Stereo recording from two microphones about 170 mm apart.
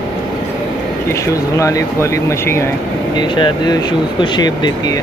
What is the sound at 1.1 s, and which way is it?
Speech, 20° left (ahead or behind).